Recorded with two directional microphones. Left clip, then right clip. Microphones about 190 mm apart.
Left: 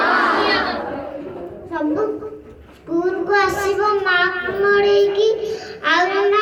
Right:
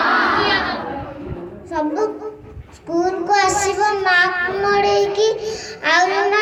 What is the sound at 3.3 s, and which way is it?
Child singing, 40° right (ahead or behind).